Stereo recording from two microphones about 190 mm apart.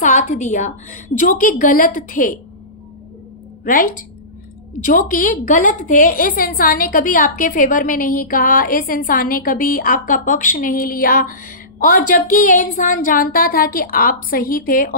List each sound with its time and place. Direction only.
0.0 s a woman's voice: 40° left (ahead or behind)
3.6 s a woman's voice: 45° left (ahead or behind)